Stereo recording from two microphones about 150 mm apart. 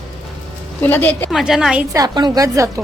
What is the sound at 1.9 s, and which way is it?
Speech, 25° right (ahead or behind).